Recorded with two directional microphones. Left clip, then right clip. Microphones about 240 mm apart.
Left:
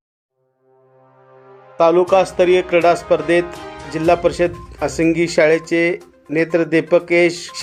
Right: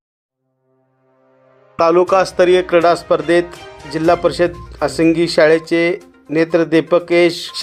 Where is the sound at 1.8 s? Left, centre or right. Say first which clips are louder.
Right 1 dB; centre.